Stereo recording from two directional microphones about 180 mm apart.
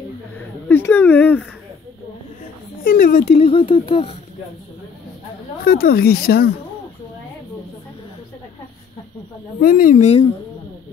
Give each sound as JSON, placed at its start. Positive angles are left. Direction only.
{"t": 0.4, "sound": "a sound", "side_deg": 10}
{"t": 2.8, "sound": "speech", "side_deg": 50}
{"t": 5.6, "sound": "speech", "side_deg": 55}
{"t": 9.6, "sound": "speech", "side_deg": 50}